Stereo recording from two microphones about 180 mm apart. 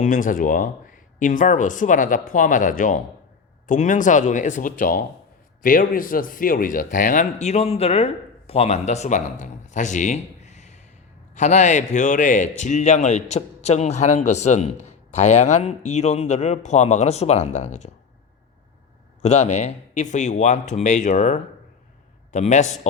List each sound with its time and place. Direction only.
0.0 s a man's voice: 45° left (ahead or behind)
19.2 s a man's voice: 40° left (ahead or behind)